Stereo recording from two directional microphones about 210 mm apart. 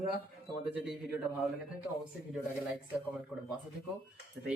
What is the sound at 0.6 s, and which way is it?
Speech, centre (ahead or behind).